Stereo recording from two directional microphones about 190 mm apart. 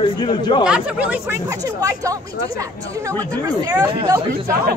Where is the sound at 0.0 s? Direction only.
25° left (ahead or behind).